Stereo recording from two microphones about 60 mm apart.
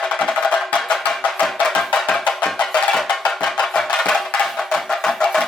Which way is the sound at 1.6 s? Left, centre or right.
Centre.